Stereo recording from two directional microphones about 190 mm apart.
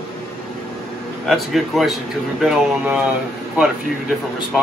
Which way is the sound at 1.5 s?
Centre (ahead or behind).